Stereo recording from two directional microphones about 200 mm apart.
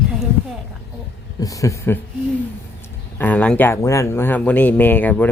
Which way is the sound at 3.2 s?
5° left (ahead or behind).